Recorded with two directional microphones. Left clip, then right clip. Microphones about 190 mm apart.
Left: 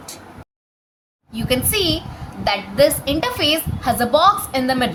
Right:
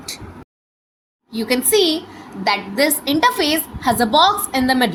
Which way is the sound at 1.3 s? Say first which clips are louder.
Right 3 dB; 15° right (ahead or behind).